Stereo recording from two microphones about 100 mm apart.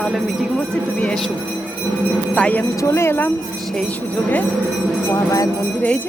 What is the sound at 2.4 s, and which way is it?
Speech, 15° left (ahead or behind).